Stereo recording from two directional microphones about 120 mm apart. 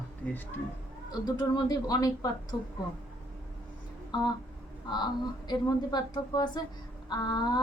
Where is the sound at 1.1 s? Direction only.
35° left (ahead or behind).